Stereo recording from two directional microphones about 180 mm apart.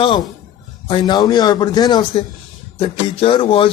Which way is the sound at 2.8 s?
30° left (ahead or behind).